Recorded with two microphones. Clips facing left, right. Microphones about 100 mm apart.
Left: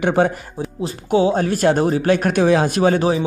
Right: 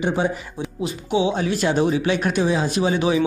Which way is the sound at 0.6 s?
45° left (ahead or behind).